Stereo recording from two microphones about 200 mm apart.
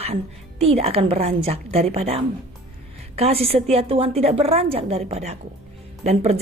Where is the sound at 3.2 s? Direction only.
30° right (ahead or behind).